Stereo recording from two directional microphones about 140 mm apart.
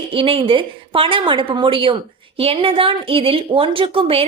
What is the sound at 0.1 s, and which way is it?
A woman's voice, 40° right (ahead or behind).